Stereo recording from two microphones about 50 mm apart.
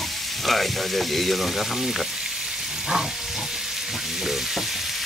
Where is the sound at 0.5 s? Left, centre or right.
Centre.